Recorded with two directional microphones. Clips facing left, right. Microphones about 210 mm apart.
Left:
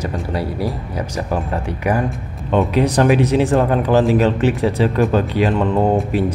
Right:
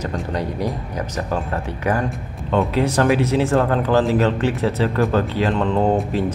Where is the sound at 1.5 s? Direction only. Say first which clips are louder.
Left 3 dB; 10° left (ahead or behind).